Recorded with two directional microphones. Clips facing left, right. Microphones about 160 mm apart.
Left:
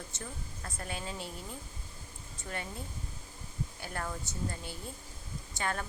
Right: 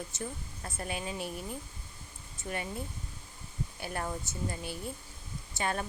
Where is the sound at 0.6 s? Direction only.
20° right (ahead or behind).